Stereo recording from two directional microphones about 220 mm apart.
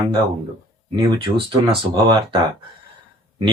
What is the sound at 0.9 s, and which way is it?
Speech, 25° right (ahead or behind).